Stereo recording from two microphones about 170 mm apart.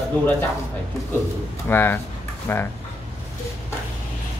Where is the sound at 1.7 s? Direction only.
15° left (ahead or behind).